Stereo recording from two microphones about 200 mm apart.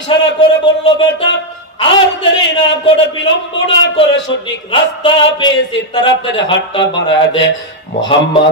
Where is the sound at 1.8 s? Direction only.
25° left (ahead or behind).